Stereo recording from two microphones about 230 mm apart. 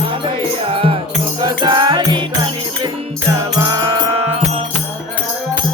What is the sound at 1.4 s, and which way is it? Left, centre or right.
Music, centre.